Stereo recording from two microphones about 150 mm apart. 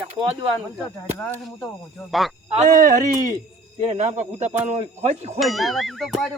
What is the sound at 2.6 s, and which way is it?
Speech, 60° right (ahead or behind).